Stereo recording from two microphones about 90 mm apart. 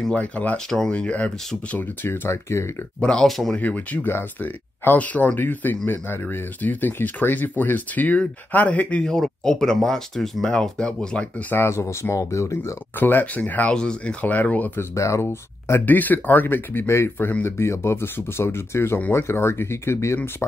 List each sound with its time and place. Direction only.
0.1 s speech: 15° left (ahead or behind)
0.7 s speech: 5° left (ahead or behind); by 2.7 s 30° left (ahead or behind)
3.0 s speech: 10° left (ahead or behind)
3.5 s speech: 15° left (ahead or behind)
11.5 s speech: 30° left (ahead or behind)
13.0 s speech: 20° left (ahead or behind)
15.0 s speech: 35° left (ahead or behind)
15.7 s speech: 20° left (ahead or behind)
18.9 s speech: 20° left (ahead or behind)